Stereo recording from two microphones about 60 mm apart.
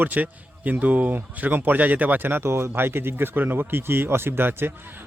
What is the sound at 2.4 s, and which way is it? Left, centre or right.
Speech, right.